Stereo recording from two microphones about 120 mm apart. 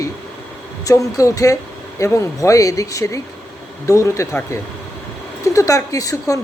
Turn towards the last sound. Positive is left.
turn(degrees=30)  # may be behind; listen again after turning